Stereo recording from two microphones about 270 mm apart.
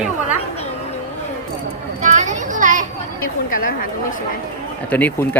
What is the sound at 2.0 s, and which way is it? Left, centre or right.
Children playing, right.